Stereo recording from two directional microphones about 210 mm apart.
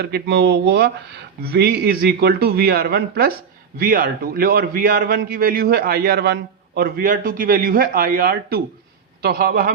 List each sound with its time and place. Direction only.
0.0 s a man's voice: 50° right (ahead or behind)